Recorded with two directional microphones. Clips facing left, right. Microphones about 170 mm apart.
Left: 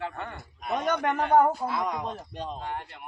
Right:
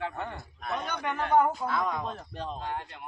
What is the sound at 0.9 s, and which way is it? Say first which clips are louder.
Speech: left 5 dB; 40° left (ahead or behind).